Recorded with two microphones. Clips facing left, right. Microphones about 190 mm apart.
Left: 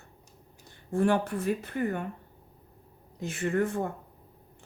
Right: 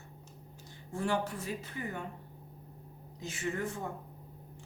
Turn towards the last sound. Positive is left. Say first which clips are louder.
# left 8 dB
turn(degrees=60)  # may be behind; listen again after turning